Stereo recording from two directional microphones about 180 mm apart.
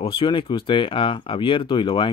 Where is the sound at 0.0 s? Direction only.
30° left (ahead or behind).